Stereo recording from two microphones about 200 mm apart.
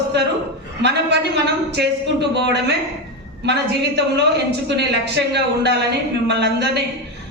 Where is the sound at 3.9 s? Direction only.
55° right (ahead or behind).